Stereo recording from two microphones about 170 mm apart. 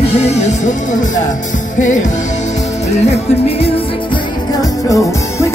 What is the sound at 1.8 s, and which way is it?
Music, 45° left (ahead or behind).